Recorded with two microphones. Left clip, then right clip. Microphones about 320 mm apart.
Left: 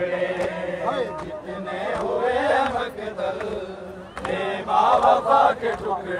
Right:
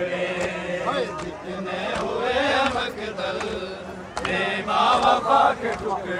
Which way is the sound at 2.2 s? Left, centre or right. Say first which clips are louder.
Even; left.